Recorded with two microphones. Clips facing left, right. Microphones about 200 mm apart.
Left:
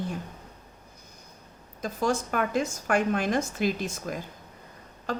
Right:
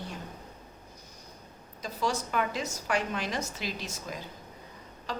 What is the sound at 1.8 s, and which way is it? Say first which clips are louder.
A woman's voice: left 4 dB; 50° left (ahead or behind).